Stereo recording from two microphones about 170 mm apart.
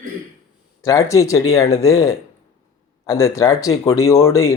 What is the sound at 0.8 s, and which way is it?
Speech, 15° left (ahead or behind).